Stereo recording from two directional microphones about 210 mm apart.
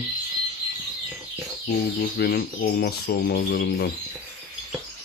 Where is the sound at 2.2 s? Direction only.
50° left (ahead or behind).